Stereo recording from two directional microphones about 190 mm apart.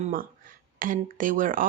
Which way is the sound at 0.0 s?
45° right (ahead or behind).